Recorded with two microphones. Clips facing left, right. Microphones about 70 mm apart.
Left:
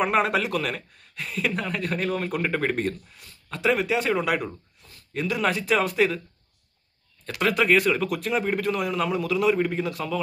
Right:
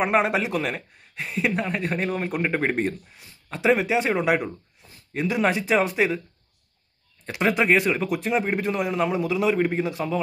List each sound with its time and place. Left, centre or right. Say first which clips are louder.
0.0 s a man's voice: right 1 dB; centre
7.2 s a man's voice: right 1 dB; right